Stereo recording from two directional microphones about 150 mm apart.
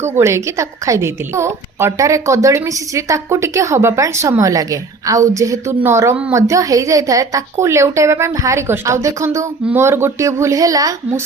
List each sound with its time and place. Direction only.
0.0 s a woman's voice: 15° right (ahead or behind)